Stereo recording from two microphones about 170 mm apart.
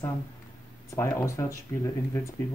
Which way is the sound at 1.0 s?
15° left (ahead or behind).